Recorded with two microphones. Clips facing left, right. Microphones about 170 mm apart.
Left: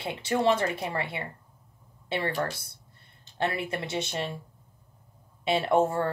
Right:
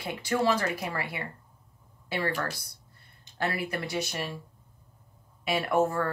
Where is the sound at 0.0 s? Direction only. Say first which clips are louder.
Left 2 dB; 25° left (ahead or behind).